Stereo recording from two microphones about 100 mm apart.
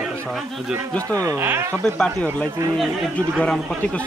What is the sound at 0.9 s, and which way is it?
Speech, 35° right (ahead or behind).